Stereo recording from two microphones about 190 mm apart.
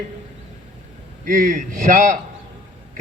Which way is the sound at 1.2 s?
45° right (ahead or behind).